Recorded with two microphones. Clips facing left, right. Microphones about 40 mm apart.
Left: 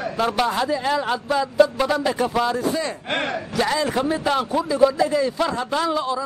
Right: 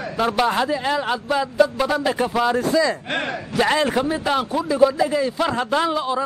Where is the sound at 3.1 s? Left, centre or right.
Centre.